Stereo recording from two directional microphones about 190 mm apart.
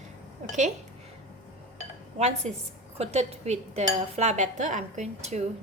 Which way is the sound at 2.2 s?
35° right (ahead or behind).